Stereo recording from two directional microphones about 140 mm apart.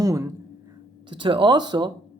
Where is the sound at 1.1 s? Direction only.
35° right (ahead or behind).